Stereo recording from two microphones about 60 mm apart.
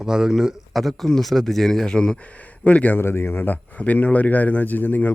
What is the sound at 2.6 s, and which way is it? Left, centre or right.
Speech, left.